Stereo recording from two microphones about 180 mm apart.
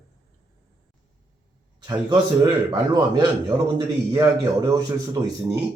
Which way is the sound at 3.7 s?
25° right (ahead or behind).